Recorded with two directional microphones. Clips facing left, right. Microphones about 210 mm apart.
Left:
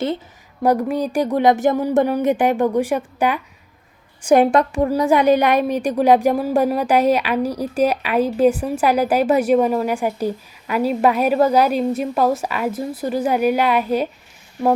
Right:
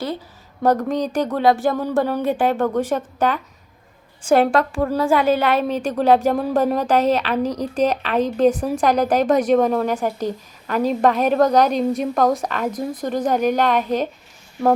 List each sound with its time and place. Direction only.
0.6 s a woman's voice: 10° left (ahead or behind)